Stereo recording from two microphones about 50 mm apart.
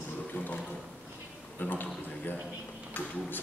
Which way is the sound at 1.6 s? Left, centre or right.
Left.